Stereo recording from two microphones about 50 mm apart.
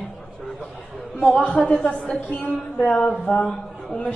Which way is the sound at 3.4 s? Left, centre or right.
Centre.